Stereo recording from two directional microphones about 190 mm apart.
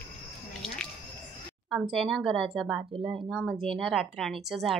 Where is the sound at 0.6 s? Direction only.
Centre (ahead or behind).